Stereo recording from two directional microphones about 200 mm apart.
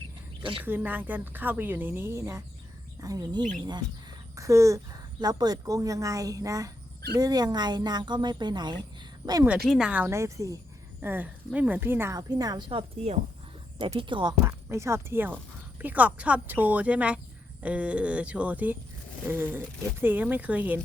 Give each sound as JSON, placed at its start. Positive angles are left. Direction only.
{"t": 0.6, "sound": "a woman's voice", "side_deg": -10}
{"t": 9.6, "sound": "a woman's voice", "side_deg": -5}